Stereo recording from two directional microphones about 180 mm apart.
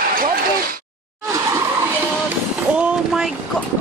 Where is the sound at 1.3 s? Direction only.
15° right (ahead or behind).